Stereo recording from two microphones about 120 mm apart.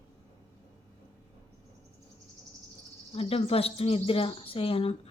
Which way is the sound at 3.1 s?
55° left (ahead or behind).